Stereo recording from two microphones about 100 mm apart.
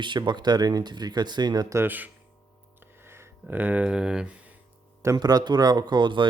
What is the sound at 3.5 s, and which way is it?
Speech, 15° right (ahead or behind).